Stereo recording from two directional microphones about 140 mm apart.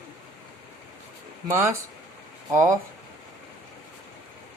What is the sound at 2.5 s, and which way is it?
Speech, 25° right (ahead or behind).